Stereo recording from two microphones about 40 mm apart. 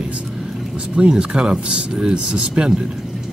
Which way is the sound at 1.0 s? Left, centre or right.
Right.